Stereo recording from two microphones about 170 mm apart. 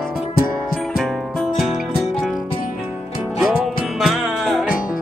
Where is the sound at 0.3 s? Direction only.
60° left (ahead or behind).